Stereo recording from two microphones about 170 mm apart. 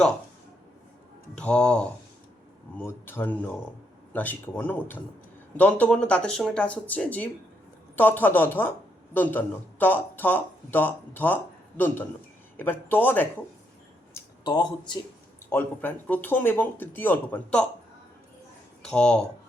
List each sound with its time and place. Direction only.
1.4 s speech: 5° left (ahead or behind)
14.1 s a sound: 20° left (ahead or behind)
15.4 s speech: 10° left (ahead or behind)
18.8 s speech: 5° left (ahead or behind)